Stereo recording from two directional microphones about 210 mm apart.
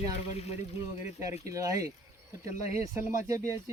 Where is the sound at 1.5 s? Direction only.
15° right (ahead or behind).